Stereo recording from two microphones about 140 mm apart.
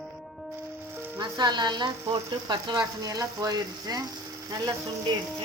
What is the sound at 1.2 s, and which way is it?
Speech, 30° right (ahead or behind).